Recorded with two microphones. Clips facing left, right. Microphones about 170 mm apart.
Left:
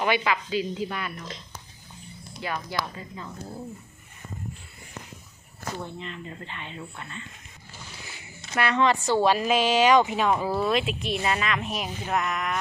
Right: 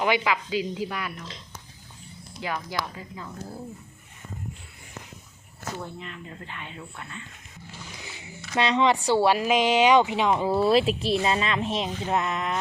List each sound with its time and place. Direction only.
0.0 s speech: 15° right (ahead or behind)
2.4 s speech: 15° right (ahead or behind)
5.8 s speech: 5° right (ahead or behind)
8.5 s a woman's voice: 15° right (ahead or behind)